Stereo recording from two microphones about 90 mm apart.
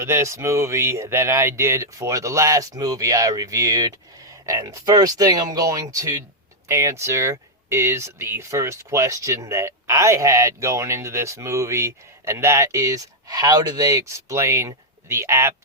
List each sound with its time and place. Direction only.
0.0 s speech: 30° right (ahead or behind)